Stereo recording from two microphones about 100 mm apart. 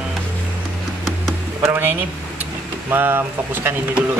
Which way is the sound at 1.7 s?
20° right (ahead or behind).